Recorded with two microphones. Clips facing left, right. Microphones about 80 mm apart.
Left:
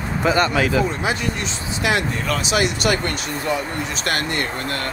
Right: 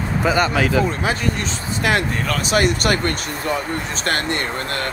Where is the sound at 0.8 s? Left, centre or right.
Right.